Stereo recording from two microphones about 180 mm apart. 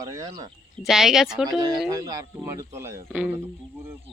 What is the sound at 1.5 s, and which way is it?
Speech, 20° right (ahead or behind).